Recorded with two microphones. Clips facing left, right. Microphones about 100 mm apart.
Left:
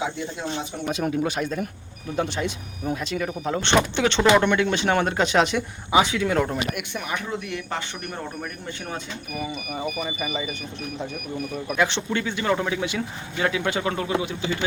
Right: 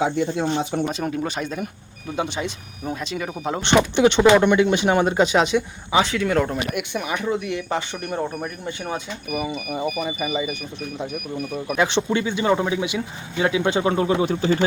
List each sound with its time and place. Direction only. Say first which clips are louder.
0.0 s speech: right 7 dB; 50° right (ahead or behind)
0.9 s speech: left 1 dB; 5° left (ahead or behind)
6.7 s speech: right 4 dB; 5° right (ahead or behind)
9.6 s speech: right 4 dB; 5° right (ahead or behind)
11.8 s speech: right 3 dB; 15° right (ahead or behind)